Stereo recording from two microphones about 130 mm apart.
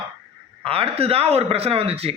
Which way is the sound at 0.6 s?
50° right (ahead or behind).